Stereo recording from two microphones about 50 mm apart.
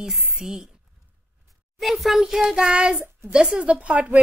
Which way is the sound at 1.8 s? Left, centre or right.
Centre.